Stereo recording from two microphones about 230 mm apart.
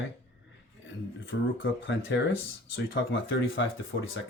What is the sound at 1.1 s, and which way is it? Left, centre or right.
Speech, left.